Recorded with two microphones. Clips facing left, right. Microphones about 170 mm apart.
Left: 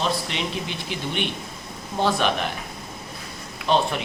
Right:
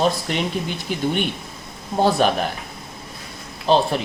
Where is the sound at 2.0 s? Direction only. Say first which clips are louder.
Right 4 dB; 40° right (ahead or behind).